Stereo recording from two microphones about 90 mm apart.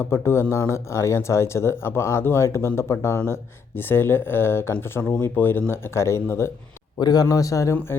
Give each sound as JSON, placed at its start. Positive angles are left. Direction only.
{"t": 0.0, "sound": "speech", "side_deg": 30}
{"t": 7.0, "sound": "a man's voice", "side_deg": 45}